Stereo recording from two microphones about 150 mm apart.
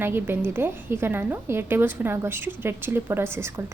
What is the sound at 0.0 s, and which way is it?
A woman's voice, 15° right (ahead or behind).